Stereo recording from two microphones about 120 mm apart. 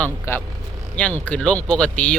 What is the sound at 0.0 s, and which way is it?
Speech, 15° left (ahead or behind).